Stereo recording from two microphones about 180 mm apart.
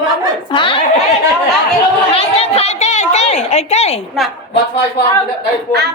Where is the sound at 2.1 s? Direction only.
35° left (ahead or behind).